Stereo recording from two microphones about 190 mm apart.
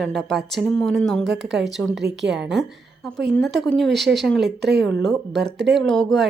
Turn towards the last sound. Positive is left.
turn(degrees=5)  # may be behind; listen again after turning